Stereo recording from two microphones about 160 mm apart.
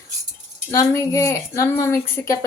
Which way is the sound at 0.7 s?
20° left (ahead or behind).